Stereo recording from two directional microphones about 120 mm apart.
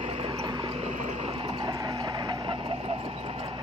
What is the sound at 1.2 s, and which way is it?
Vehicle, 50° right (ahead or behind).